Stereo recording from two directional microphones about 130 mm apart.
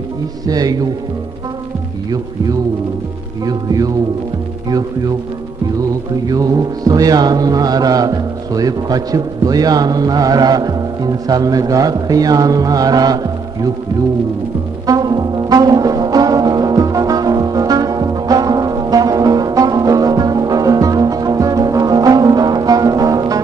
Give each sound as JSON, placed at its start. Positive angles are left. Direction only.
{"t": 0.5, "sound": "music", "side_deg": -30}
{"t": 3.4, "sound": "music", "side_deg": -30}
{"t": 6.2, "sound": "music", "side_deg": -30}
{"t": 14.9, "sound": "brass instrument", "side_deg": -30}